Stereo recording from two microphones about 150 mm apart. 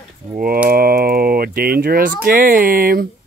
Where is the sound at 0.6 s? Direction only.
90° right.